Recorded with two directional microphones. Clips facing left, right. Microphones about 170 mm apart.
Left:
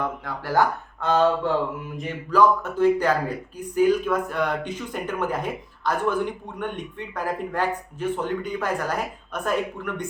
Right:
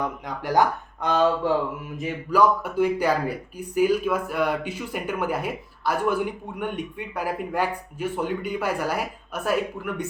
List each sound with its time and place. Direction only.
0.0 s speech: 15° right (ahead or behind)